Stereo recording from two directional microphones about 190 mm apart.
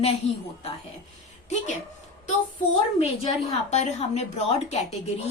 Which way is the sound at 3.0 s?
35° left (ahead or behind).